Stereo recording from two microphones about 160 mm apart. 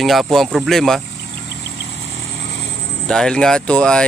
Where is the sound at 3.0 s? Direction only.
5° left (ahead or behind).